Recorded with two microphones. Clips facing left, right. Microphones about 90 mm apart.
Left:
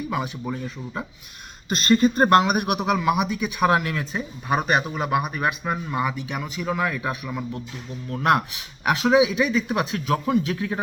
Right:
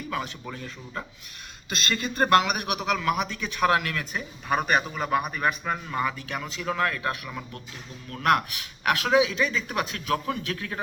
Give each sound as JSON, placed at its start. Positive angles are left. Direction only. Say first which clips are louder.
{"t": 0.1, "sound": "a man's voice", "louder": "left 5 dB", "side_deg": 15}
{"t": 1.7, "sound": "speech", "louder": "left 11 dB", "side_deg": 40}
{"t": 2.8, "sound": "a man's voice", "louder": "left 2 dB", "side_deg": 15}